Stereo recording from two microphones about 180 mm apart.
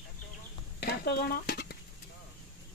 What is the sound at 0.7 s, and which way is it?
Dishes, 60° left (ahead or behind).